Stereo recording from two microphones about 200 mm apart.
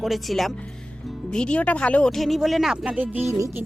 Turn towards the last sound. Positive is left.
turn(degrees=-15)  # may be behind; listen again after turning